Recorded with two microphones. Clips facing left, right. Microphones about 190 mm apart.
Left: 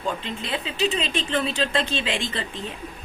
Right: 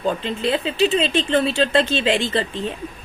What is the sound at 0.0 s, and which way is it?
Speech, 35° right (ahead or behind).